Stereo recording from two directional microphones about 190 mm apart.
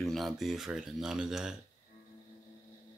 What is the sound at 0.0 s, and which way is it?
Speech, centre (ahead or behind).